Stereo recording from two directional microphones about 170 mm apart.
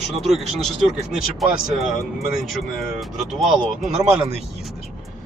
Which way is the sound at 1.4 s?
Centre (ahead or behind).